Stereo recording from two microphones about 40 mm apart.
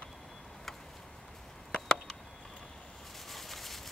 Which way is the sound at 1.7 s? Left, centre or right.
Centre.